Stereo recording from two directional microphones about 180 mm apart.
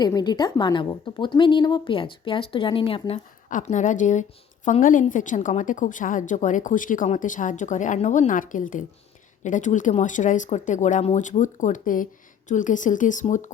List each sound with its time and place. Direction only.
0.0 s a woman's voice: 20° left (ahead or behind)
3.5 s a woman's voice: 40° left (ahead or behind)